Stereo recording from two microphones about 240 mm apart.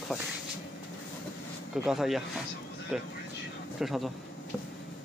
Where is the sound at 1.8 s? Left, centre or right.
Centre.